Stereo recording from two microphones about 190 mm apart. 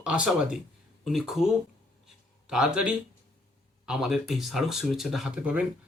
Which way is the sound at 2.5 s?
5° right (ahead or behind).